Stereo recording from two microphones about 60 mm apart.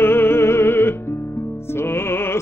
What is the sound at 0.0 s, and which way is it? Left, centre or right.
Music, left.